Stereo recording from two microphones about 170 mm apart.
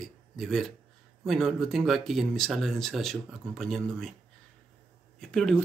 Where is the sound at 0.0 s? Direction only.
Centre (ahead or behind).